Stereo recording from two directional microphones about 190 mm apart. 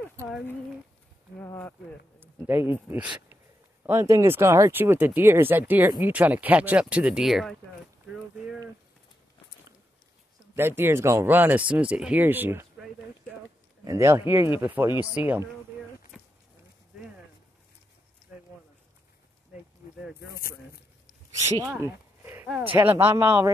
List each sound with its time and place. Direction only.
1.4 s speech: 10° left (ahead or behind)
2.1 s speech: 10° right (ahead or behind)
10.5 s speech: 10° right (ahead or behind)
13.8 s speech: 15° right (ahead or behind)
16.1 s a sound: 5° right (ahead or behind)
20.2 s speech: 50° left (ahead or behind)
21.5 s a sound: 15° right (ahead or behind)
22.8 s speech: 10° right (ahead or behind)